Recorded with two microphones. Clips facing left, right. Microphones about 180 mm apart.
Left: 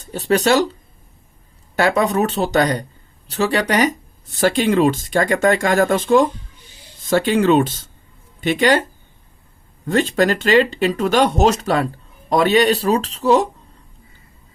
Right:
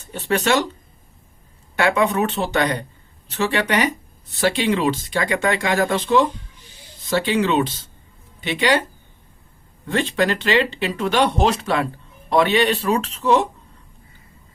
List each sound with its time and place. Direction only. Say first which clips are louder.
0.0 s speech: left 4 dB; 35° left (ahead or behind)
1.7 s speech: left 2 dB; 40° left (ahead or behind)
9.8 s speech: left 4 dB; 45° left (ahead or behind)